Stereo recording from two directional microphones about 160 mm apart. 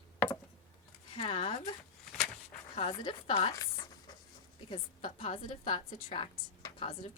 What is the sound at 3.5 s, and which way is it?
Chopping, 25° left (ahead or behind).